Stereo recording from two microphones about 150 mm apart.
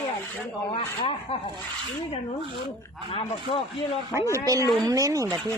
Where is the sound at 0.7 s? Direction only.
40° left (ahead or behind).